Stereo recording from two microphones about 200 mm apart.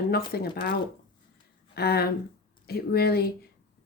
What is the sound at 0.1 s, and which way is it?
Speech, 50° left (ahead or behind).